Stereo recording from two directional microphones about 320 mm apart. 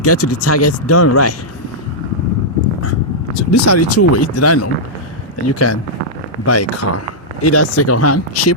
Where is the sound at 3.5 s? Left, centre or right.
Left.